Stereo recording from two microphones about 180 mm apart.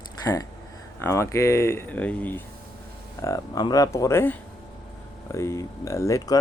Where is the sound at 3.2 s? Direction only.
20° left (ahead or behind).